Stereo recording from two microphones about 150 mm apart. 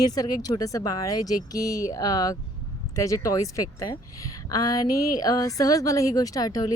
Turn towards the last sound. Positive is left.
turn(degrees=25)  # may be behind; listen again after turning